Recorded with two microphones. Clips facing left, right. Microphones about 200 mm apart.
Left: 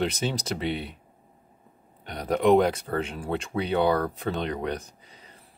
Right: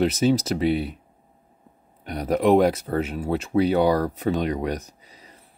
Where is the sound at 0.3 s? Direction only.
5° right (ahead or behind).